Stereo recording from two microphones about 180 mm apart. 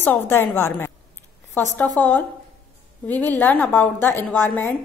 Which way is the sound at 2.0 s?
10° left (ahead or behind).